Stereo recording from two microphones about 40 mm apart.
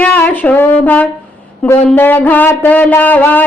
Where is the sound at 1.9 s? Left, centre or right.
Left.